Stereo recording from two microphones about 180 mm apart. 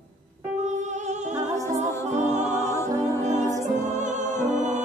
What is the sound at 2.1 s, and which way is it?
Music, 40° right (ahead or behind).